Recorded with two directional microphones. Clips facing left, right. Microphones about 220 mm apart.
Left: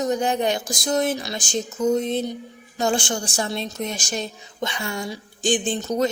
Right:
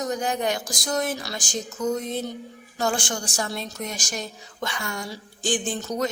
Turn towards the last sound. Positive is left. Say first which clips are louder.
# left 4 dB
turn(degrees=25)  # may be behind; listen again after turning